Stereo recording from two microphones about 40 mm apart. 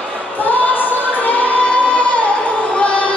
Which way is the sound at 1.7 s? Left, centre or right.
Left.